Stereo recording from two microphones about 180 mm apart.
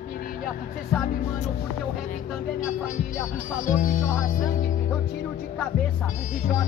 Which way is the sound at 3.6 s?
45° left (ahead or behind).